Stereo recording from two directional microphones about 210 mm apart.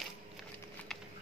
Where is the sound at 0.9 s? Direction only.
Centre (ahead or behind).